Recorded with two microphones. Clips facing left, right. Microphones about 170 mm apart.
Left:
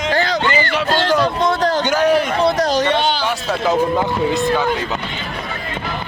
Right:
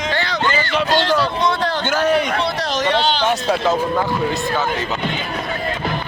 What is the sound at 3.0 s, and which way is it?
Speech, 10° left (ahead or behind).